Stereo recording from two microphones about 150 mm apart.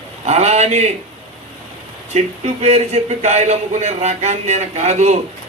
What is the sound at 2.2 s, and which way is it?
A man's voice, 45° right (ahead or behind).